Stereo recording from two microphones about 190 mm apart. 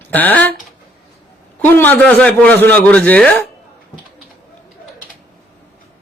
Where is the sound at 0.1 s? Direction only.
10° left (ahead or behind).